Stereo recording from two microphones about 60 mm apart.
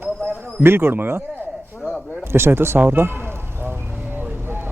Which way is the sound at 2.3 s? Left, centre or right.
Right.